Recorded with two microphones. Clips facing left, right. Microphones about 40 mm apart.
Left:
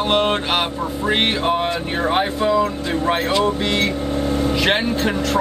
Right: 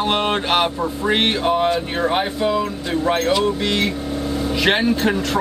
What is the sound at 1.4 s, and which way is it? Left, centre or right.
Music, centre.